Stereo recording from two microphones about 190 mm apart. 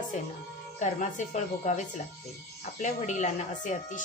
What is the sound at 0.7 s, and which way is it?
Speech, 40° left (ahead or behind).